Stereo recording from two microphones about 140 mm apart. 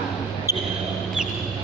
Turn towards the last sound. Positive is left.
turn(degrees=-20)  # may be behind; listen again after turning